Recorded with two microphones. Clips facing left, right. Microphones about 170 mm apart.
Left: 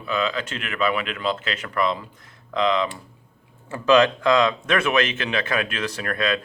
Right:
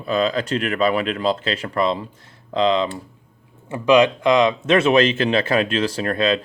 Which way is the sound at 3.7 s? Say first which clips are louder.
Right 2 dB; 15° right (ahead or behind).